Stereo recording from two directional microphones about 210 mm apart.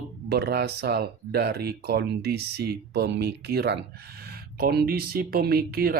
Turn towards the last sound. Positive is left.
turn(degrees=-45)  # may be behind; listen again after turning